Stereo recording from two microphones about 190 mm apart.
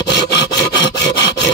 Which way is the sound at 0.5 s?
20° left (ahead or behind).